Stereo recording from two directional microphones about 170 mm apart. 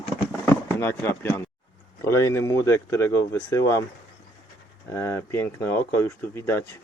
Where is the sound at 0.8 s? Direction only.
15° left (ahead or behind).